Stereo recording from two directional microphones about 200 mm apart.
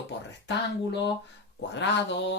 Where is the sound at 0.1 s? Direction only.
60° left (ahead or behind).